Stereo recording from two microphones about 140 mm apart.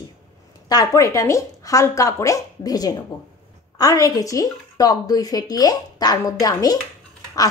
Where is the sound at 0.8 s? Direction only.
20° left (ahead or behind).